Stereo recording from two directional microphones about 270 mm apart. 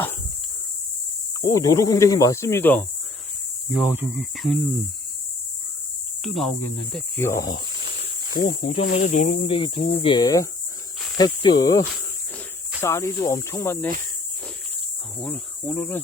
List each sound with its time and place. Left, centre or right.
1.4 s speech: centre
3.8 s insect: centre
6.2 s speech: centre
9.0 s cricket: left
10.0 s speech: centre
12.8 s speech: centre
15.2 s speech: centre